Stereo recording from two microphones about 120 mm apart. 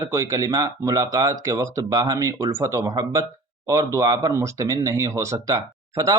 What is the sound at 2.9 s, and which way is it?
Speech, 35° right (ahead or behind).